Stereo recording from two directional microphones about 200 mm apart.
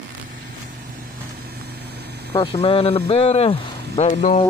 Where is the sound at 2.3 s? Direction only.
25° left (ahead or behind).